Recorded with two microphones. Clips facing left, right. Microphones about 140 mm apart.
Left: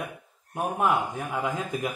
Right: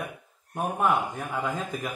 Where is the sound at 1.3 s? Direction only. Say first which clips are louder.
Left 1 dB; 10° left (ahead or behind).